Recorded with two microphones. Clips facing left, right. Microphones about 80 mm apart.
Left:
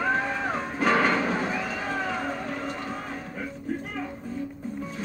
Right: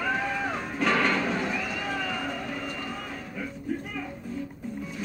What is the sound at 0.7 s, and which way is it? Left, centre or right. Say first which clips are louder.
Music: left 2 dB; left.